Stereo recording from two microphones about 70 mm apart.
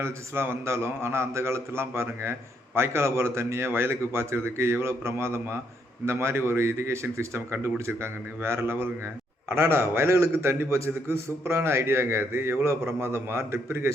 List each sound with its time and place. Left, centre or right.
0.0 s a man's voice: right